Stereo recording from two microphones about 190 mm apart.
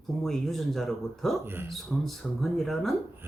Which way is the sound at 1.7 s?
Centre (ahead or behind).